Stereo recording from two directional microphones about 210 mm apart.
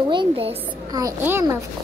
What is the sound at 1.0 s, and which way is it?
Speech, 15° right (ahead or behind).